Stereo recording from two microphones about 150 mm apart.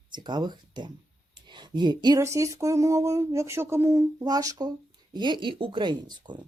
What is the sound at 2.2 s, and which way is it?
Speech, 20° right (ahead or behind).